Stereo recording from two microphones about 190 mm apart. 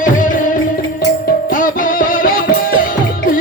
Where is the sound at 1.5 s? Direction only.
45° left (ahead or behind).